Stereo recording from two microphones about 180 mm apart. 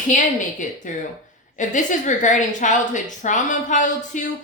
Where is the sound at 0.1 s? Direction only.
45° left (ahead or behind).